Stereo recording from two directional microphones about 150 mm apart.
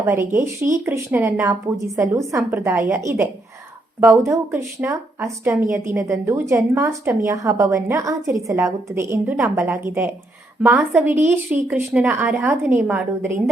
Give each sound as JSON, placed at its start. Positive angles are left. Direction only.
{"t": 0.0, "sound": "a woman's voice", "side_deg": -20}